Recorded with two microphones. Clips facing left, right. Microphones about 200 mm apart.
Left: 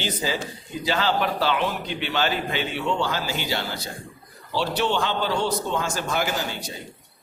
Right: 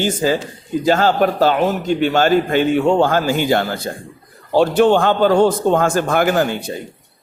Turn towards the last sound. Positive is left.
turn(degrees=-55)  # may be behind; listen again after turning